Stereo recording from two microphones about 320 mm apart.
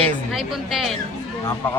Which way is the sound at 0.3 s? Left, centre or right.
Centre.